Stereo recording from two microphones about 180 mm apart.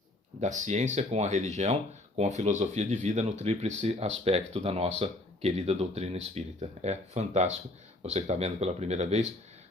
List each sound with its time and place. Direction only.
0.3 s speech: 40° right (ahead or behind)